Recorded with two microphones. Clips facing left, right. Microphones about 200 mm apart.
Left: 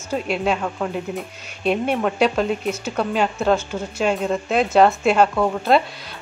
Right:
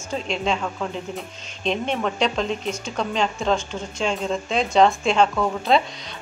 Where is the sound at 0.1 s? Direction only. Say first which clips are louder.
Left 3 dB; 5° left (ahead or behind).